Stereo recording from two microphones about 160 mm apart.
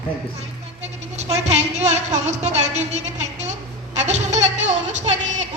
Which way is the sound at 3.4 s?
45° right (ahead or behind).